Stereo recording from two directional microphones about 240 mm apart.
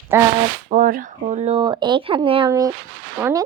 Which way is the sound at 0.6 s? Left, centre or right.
Right.